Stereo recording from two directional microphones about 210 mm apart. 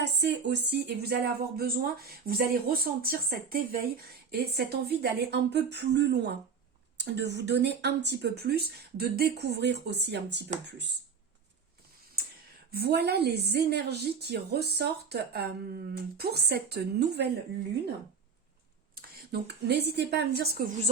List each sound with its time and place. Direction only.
0.0 s speech: 55° right (ahead or behind)
12.7 s speech: 50° right (ahead or behind)
18.9 s speech: 50° right (ahead or behind)